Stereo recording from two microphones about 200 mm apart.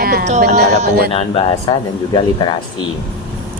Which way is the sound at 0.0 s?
50° right (ahead or behind).